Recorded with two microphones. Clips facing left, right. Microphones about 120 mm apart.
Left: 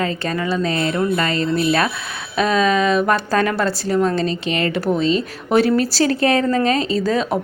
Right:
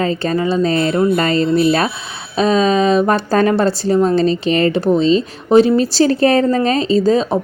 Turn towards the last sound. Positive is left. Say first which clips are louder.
# right 5 dB
turn(degrees=-30)  # may be behind; listen again after turning